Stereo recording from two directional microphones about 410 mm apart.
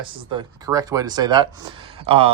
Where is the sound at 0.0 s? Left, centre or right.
Centre.